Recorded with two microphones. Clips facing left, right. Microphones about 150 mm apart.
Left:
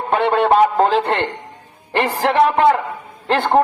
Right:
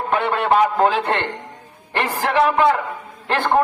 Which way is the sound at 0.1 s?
45° left (ahead or behind).